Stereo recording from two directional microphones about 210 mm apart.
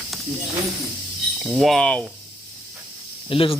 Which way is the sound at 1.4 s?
Centre (ahead or behind).